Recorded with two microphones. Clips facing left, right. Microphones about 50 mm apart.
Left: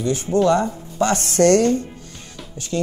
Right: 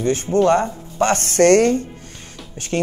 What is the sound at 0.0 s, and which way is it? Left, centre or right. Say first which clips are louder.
Speech: right 2 dB; right.